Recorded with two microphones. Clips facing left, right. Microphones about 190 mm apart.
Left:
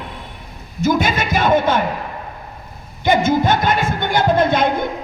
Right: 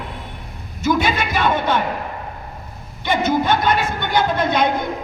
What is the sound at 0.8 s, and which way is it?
Speech, 45° left (ahead or behind).